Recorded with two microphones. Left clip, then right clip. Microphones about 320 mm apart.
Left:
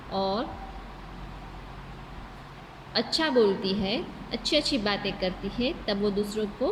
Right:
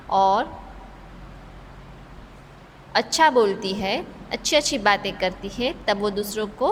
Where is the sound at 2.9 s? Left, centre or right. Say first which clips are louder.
Right 7 dB; centre.